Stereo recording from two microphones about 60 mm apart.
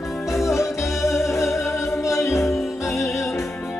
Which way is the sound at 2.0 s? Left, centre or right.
Left.